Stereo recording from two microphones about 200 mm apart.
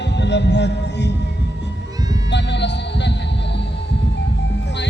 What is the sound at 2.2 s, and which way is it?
Music, 60° left (ahead or behind).